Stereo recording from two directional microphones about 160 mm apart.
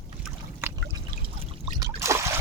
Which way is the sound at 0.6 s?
15° right (ahead or behind).